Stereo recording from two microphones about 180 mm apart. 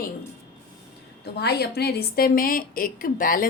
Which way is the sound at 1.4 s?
65° left (ahead or behind).